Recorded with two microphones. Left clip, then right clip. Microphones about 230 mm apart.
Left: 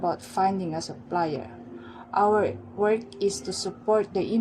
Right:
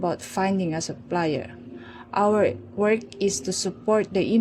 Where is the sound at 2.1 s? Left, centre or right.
Right.